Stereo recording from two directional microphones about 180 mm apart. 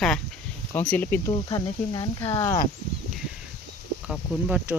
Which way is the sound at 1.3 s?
25° left (ahead or behind).